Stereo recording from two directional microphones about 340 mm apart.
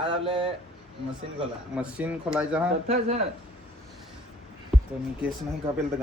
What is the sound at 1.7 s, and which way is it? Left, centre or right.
Speech, centre.